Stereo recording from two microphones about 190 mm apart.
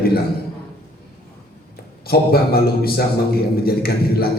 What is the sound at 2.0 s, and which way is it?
A man's voice, 55° left (ahead or behind).